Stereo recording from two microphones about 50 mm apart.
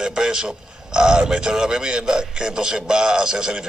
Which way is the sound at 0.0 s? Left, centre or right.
Centre.